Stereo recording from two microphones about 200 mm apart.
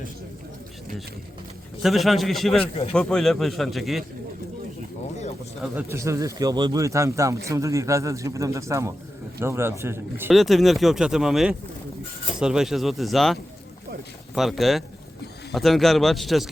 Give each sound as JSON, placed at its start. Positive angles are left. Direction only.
{"t": 1.8, "sound": "speech", "side_deg": 0}
{"t": 5.6, "sound": "speech", "side_deg": -10}
{"t": 10.3, "sound": "speech", "side_deg": 0}